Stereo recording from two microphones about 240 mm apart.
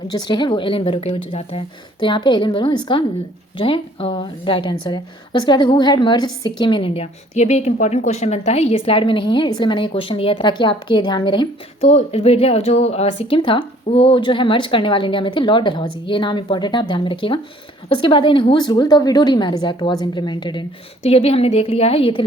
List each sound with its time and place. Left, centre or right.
0.3 s speech: centre